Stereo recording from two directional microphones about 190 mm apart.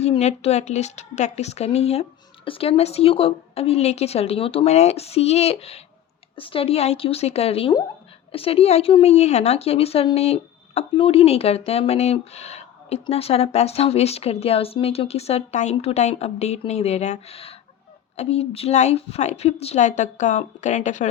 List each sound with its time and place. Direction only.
0.0 s a woman's voice: 35° left (ahead or behind)